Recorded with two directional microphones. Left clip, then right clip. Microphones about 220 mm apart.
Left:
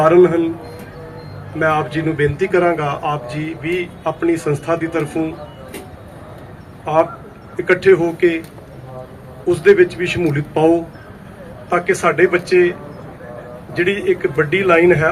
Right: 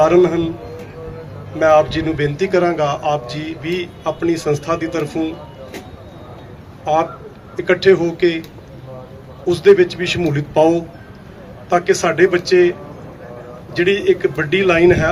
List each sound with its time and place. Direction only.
0.0 s a man's voice: 45° right (ahead or behind)
1.5 s a man's voice: 45° right (ahead or behind)
6.8 s a man's voice: 45° right (ahead or behind)
9.5 s a man's voice: 50° right (ahead or behind)
12.0 s a man's voice: 45° right (ahead or behind)
13.7 s a man's voice: 45° right (ahead or behind)